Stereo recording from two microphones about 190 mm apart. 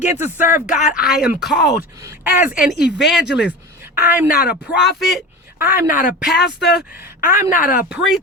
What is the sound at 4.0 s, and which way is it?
A man's voice, 10° right (ahead or behind).